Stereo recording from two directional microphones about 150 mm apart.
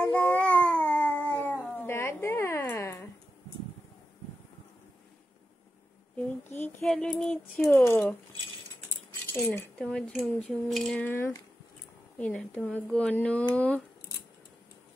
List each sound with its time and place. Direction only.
0.0 s babbling: 10° left (ahead or behind)
6.8 s a sound: 5° left (ahead or behind)
7.6 s speech: 15° left (ahead or behind)
9.3 s speech: 15° left (ahead or behind)